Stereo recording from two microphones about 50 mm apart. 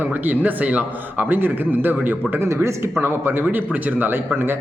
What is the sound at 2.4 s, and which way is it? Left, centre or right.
Speech, right.